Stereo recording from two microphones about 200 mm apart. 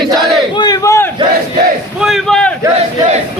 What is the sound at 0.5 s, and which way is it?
Speech, 20° left (ahead or behind).